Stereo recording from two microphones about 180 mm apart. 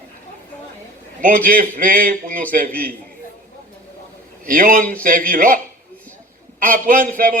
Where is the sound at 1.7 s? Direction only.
50° right (ahead or behind).